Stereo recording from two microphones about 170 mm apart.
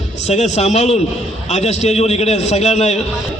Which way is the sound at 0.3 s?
40° left (ahead or behind).